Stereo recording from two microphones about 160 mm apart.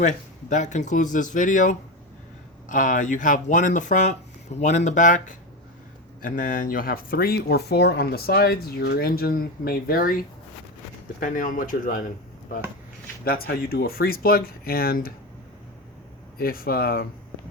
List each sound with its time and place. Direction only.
0.5 s speech: 50° left (ahead or behind); by 10.2 s 65° left (ahead or behind)
11.2 s speech: 55° left (ahead or behind)
13.2 s speech: 70° left (ahead or behind)
16.4 s speech: 65° left (ahead or behind)